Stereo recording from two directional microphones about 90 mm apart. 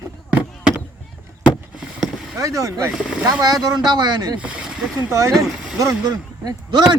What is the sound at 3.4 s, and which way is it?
Speech, 45° right (ahead or behind).